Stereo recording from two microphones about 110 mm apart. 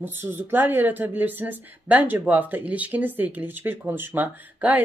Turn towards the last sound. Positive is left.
turn(degrees=-15)  # may be behind; listen again after turning